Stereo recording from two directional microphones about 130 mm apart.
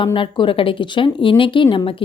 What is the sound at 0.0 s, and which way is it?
A woman's voice, 40° left (ahead or behind).